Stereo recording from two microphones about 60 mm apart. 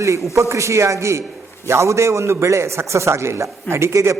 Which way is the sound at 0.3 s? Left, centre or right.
Right.